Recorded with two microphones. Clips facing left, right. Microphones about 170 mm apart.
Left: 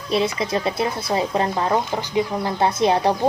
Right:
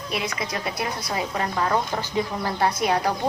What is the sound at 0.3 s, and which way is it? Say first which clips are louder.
Speech: left 6 dB; 25° left (ahead or behind).